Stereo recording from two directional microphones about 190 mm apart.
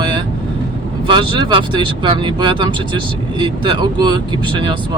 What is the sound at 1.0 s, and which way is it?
Speech, 25° right (ahead or behind).